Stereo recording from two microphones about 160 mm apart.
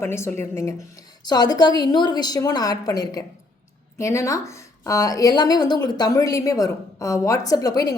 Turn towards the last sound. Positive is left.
turn(degrees=20)  # may be behind; listen again after turning